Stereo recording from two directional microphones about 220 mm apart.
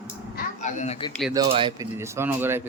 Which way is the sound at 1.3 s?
20° right (ahead or behind).